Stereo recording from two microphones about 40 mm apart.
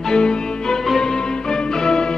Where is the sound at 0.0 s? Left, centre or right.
Centre.